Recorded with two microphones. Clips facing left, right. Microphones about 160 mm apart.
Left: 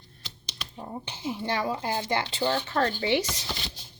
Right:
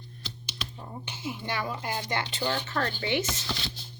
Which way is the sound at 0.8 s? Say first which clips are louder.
Left 6 dB; 30° left (ahead or behind).